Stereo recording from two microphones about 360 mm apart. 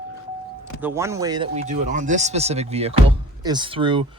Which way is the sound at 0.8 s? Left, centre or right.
Centre.